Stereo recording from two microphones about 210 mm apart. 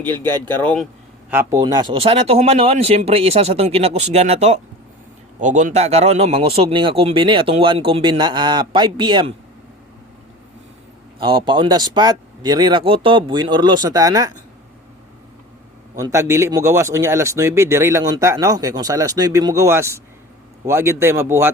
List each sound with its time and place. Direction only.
0.5 s speech: 5° left (ahead or behind)
1.3 s speech: 10° right (ahead or behind)
11.2 s speech: 25° right (ahead or behind)
16.0 s speech: 15° right (ahead or behind)